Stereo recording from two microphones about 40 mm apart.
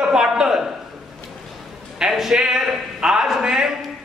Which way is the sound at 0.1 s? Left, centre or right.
Centre.